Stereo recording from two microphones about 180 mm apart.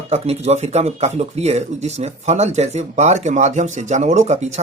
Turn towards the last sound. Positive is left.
turn(degrees=-40)  # may be behind; listen again after turning